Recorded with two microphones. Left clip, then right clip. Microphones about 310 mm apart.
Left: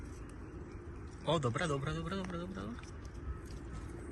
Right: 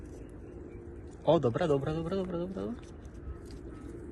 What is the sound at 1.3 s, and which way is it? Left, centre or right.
A man's voice, centre.